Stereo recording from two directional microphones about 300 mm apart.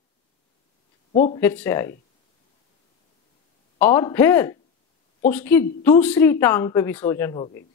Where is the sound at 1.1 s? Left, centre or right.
Left.